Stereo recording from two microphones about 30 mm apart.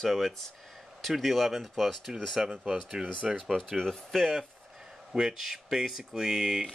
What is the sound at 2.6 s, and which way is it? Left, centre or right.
Speech, centre.